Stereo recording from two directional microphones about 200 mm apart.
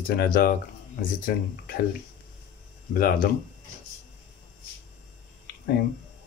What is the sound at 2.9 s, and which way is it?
Speech, 45° left (ahead or behind).